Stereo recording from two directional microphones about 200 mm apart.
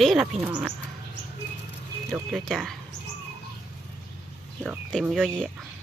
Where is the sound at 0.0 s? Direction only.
Centre (ahead or behind).